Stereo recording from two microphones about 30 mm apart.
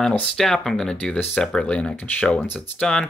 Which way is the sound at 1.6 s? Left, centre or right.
Left.